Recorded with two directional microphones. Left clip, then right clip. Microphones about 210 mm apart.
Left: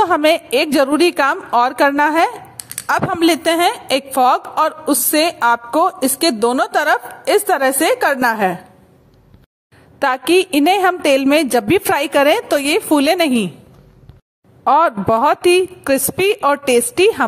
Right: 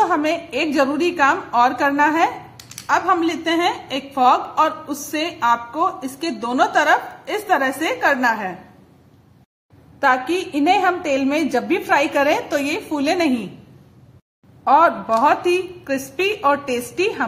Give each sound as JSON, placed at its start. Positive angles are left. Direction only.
{"t": 0.0, "sound": "a woman's voice", "side_deg": 40}
{"t": 9.9, "sound": "a woman's voice", "side_deg": 40}
{"t": 14.6, "sound": "a woman's voice", "side_deg": 40}